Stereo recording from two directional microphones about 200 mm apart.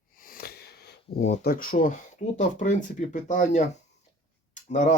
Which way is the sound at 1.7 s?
35° left (ahead or behind).